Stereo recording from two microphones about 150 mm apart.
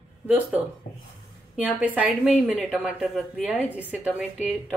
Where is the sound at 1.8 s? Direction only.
10° right (ahead or behind).